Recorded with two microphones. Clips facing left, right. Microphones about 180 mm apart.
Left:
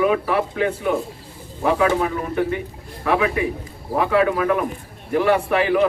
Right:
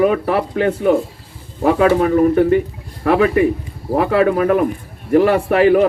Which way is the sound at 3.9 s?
35° right (ahead or behind).